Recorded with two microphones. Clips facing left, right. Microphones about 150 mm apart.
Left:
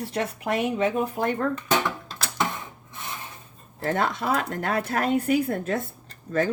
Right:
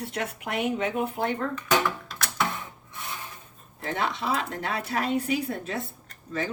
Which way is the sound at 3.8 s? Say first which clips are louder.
Left 4 dB; 50° left (ahead or behind).